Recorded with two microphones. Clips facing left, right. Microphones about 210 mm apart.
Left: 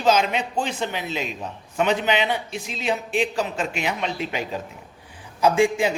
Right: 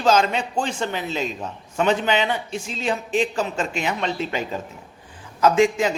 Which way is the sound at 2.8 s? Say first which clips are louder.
Right 1 dB; 10° left (ahead or behind).